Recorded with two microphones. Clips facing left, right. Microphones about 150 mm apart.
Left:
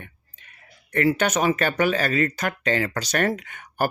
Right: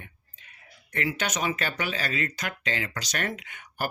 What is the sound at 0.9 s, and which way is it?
Speech, 55° left (ahead or behind).